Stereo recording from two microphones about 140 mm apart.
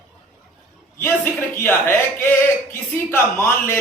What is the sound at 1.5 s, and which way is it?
A man's voice, 15° left (ahead or behind).